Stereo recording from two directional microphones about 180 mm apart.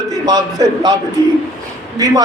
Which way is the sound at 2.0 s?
20° right (ahead or behind).